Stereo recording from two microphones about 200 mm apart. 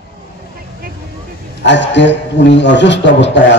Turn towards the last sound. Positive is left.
turn(degrees=60)  # may be behind; listen again after turning